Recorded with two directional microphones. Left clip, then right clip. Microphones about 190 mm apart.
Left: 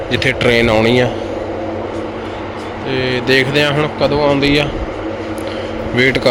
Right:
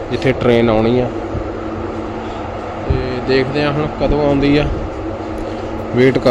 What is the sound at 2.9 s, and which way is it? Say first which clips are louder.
Speech: left 4 dB; 15° left (ahead or behind).